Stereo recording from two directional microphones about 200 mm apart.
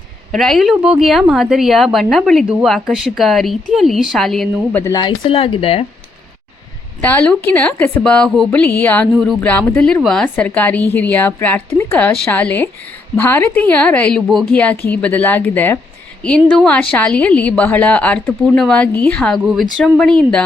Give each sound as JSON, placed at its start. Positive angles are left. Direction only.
{"t": 0.3, "sound": "a woman's voice", "side_deg": 0}
{"t": 4.8, "sound": "speech", "side_deg": 20}
{"t": 7.0, "sound": "a woman's voice", "side_deg": 5}